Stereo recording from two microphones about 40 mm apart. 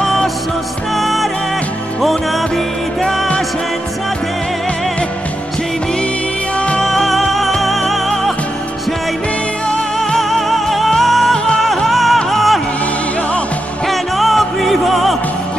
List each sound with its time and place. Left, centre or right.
0.0 s music: centre
6.8 s music: centre
9.9 s music: centre
11.3 s music: left
11.6 s music: centre
13.8 s music: centre